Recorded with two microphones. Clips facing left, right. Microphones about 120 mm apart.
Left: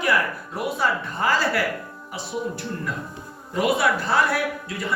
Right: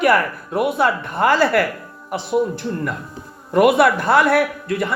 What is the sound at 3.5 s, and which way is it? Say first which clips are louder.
Speech: right 8 dB; 60° right (ahead or behind).